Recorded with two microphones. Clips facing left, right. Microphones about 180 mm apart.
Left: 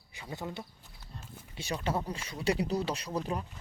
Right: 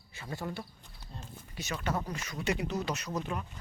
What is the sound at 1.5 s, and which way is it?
Speech, 30° left (ahead or behind).